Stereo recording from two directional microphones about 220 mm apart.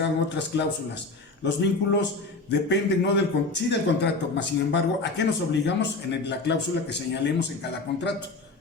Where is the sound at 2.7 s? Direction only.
50° left (ahead or behind).